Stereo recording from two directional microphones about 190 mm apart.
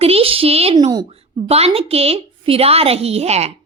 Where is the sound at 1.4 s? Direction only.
30° right (ahead or behind).